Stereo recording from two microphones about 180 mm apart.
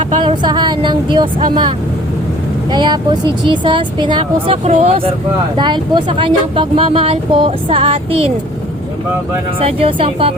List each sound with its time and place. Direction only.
0.2 s speech: 25° right (ahead or behind)
2.7 s speech: 25° right (ahead or behind)
9.6 s speech: 30° right (ahead or behind)